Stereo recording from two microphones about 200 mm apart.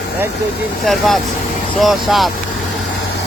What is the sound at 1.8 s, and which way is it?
Speech, centre (ahead or behind).